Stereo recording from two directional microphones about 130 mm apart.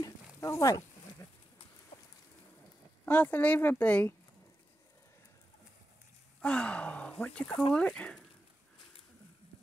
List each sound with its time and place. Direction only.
0.0 s a sound: 20° left (ahead or behind)
3.1 s speech: 15° left (ahead or behind)
6.4 s speech: 10° left (ahead or behind)